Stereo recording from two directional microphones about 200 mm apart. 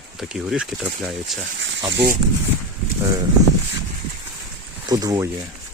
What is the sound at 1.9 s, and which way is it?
Speech, 45° right (ahead or behind).